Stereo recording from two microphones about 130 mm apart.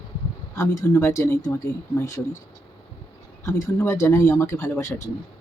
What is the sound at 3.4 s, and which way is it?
Speech, 20° left (ahead or behind).